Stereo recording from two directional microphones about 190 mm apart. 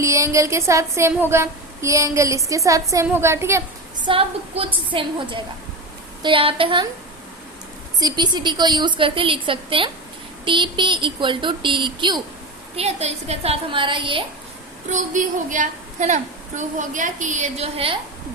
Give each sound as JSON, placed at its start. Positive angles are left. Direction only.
{"t": 0.0, "sound": "a sound", "side_deg": -15}
{"t": 4.0, "sound": "a woman's voice", "side_deg": -30}
{"t": 7.9, "sound": "a woman's voice", "side_deg": -20}
{"t": 14.8, "sound": "a woman's voice", "side_deg": -40}